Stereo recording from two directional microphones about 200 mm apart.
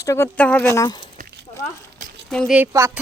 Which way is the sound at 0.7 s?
20° left (ahead or behind).